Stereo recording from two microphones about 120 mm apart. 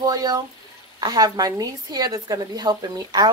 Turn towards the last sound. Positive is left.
turn(degrees=-35)  # may be behind; listen again after turning